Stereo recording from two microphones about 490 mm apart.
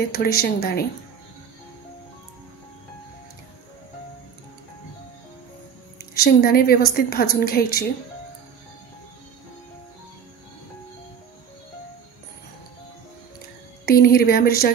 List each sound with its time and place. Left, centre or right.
0.1 s speech: centre
6.1 s a woman's voice: centre
13.8 s a woman's voice: centre